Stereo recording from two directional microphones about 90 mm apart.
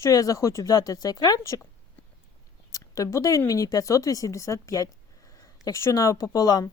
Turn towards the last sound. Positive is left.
turn(degrees=45)  # may be behind; listen again after turning